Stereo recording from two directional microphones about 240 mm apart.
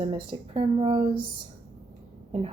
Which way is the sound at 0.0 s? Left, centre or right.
Right.